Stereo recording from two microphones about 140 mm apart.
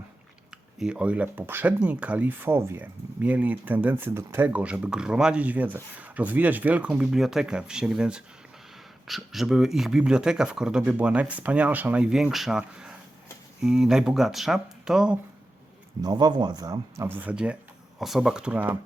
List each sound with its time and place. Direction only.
0.5 s speech: 5° right (ahead or behind)
16.0 s speech: 30° right (ahead or behind)
17.0 s speech: 15° right (ahead or behind)